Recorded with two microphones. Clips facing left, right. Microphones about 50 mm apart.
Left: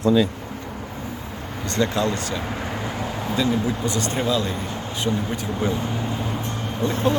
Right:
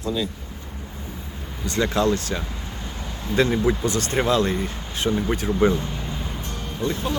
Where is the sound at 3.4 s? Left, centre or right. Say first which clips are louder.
Right 3 dB; right.